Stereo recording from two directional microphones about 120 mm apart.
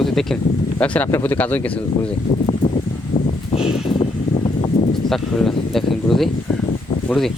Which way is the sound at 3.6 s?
5° right (ahead or behind).